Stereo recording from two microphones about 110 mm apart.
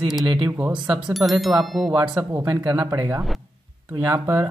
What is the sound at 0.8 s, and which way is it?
Speech, 5° right (ahead or behind).